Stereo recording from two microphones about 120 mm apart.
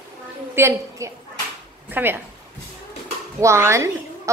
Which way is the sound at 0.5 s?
20° right (ahead or behind).